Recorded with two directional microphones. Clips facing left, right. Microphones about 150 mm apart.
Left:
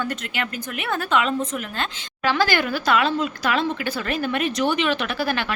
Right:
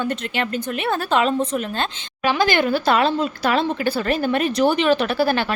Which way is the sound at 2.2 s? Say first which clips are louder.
Right 3 dB; 15° right (ahead or behind).